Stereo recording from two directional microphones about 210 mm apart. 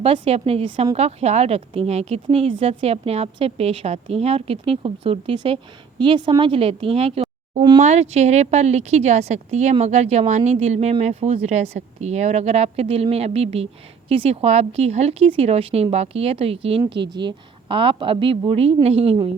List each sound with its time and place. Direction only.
0.0 s a woman's voice: 30° right (ahead or behind)